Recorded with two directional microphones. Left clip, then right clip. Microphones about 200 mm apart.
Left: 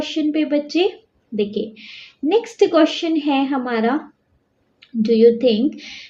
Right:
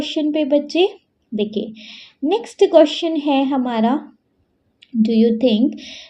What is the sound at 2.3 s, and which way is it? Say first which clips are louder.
A woman's voice: right 2 dB; 50° right (ahead or behind).